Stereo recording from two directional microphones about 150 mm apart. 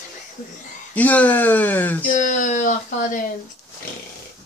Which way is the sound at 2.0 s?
55° left (ahead or behind).